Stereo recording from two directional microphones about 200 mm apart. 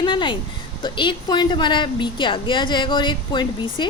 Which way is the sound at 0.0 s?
25° left (ahead or behind).